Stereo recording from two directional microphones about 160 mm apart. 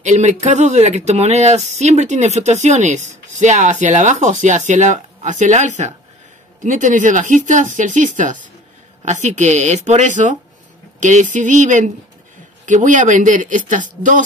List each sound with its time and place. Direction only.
0.0 s speech: 45° right (ahead or behind)